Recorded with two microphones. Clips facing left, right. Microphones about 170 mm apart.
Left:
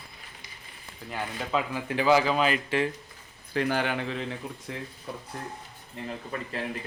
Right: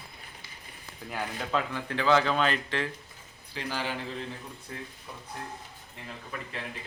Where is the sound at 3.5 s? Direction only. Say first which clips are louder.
Left 7 dB; 55° left (ahead or behind).